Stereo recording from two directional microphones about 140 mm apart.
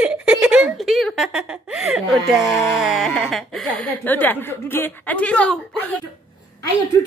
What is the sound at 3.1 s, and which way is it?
Speech, centre (ahead or behind).